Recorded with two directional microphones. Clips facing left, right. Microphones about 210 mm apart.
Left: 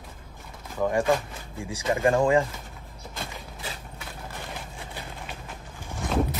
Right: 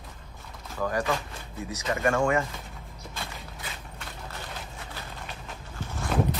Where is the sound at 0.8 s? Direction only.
25° left (ahead or behind).